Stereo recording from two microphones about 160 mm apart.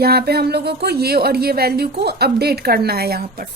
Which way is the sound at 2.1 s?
90° right.